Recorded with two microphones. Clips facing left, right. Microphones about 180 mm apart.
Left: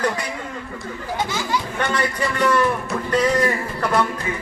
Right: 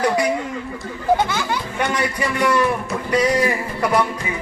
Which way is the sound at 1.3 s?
60° right (ahead or behind).